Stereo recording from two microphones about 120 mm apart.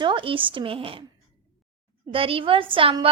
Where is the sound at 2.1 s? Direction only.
50° right (ahead or behind).